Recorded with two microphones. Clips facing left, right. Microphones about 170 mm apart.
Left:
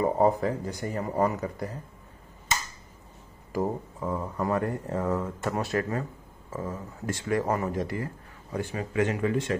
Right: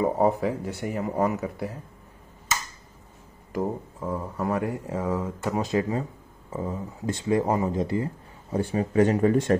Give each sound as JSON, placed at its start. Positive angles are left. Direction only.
{"t": 0.0, "sound": "speech", "side_deg": -10}
{"t": 3.5, "sound": "speech", "side_deg": 0}